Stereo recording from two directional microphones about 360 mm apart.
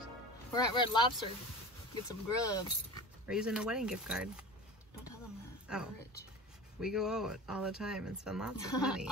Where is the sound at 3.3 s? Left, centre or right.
Centre.